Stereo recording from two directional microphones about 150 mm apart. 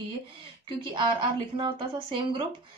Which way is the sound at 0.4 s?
35° right (ahead or behind).